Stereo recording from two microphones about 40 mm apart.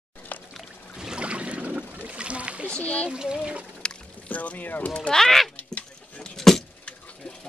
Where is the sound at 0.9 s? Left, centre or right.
Centre.